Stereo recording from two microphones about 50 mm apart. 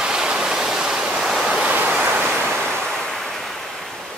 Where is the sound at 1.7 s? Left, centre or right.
Right.